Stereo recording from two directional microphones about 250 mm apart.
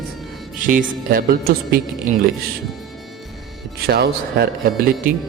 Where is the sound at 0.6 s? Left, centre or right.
Right.